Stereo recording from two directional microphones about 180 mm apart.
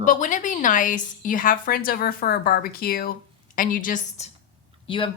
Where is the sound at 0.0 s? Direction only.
45° left (ahead or behind).